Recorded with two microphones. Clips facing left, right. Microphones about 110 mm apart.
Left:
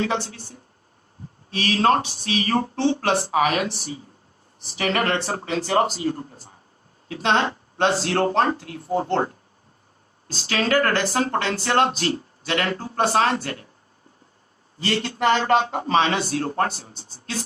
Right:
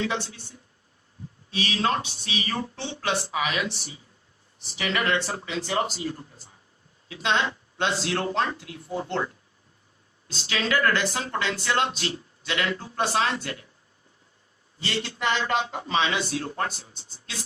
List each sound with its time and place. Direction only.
0.0 s speech: 45° left (ahead or behind)
14.8 s speech: 50° left (ahead or behind)